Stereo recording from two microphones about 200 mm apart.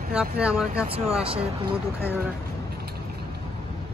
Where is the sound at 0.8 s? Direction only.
30° right (ahead or behind).